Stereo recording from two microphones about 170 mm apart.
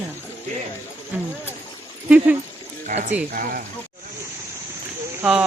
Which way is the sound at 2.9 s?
40° right (ahead or behind).